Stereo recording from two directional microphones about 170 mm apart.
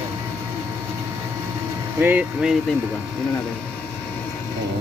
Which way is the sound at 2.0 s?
10° right (ahead or behind).